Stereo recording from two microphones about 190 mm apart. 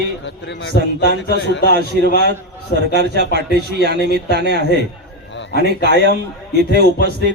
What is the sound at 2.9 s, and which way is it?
A man's voice, 60° right (ahead or behind).